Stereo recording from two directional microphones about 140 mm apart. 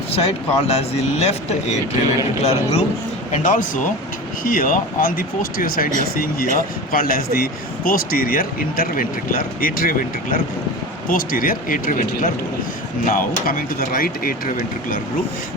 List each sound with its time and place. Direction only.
0.2 s speech: 50° left (ahead or behind)
3.3 s speech: 70° left (ahead or behind)
4.4 s speech: 90° left
13.1 s speech: 90° left